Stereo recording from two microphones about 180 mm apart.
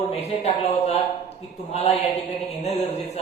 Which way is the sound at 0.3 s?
35° left (ahead or behind).